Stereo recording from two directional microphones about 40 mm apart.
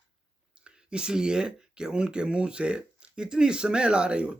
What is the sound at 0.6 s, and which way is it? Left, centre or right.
Speech, right.